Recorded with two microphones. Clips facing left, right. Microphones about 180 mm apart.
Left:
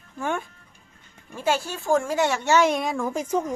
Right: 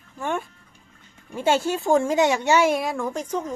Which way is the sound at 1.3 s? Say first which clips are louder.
Right 4 dB; 25° right (ahead or behind).